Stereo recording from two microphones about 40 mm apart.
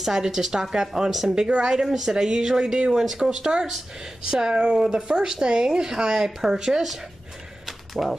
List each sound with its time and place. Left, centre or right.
0.0 s speech: centre
1.3 s speech: centre
7.6 s a sound: centre